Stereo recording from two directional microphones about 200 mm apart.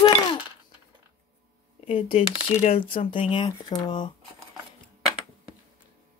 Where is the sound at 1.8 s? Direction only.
30° left (ahead or behind).